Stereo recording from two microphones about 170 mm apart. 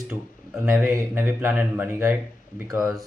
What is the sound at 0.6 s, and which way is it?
Speech, 15° right (ahead or behind).